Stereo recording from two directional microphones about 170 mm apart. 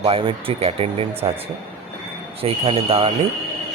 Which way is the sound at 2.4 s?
35° right (ahead or behind).